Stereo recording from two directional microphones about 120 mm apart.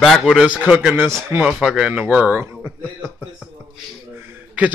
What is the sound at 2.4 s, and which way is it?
Speech, 20° right (ahead or behind).